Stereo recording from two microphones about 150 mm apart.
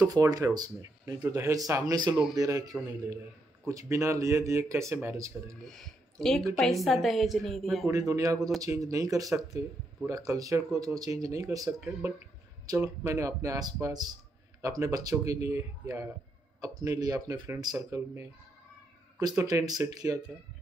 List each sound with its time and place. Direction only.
0.0 s speech: 25° right (ahead or behind)
5.6 s speech: 5° left (ahead or behind)
7.9 s speech: 20° right (ahead or behind)
12.8 s speech: 20° right (ahead or behind)
17.7 s speech: 15° right (ahead or behind)